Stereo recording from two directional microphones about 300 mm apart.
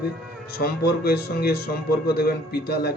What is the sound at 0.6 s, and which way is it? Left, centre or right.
Speech, left.